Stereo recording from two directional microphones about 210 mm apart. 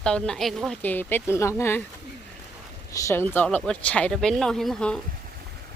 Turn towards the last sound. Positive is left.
turn(degrees=5)  # may be behind; listen again after turning